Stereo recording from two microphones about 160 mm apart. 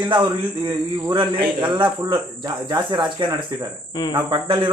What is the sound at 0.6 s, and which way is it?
Speech, 30° right (ahead or behind).